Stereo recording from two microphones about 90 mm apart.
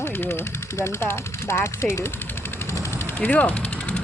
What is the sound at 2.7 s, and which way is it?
Vehicle, 30° left (ahead or behind).